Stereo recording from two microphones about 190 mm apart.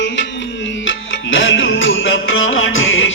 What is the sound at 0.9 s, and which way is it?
Music, 80° left.